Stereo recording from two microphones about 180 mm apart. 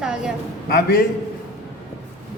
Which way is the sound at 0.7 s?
55° left (ahead or behind).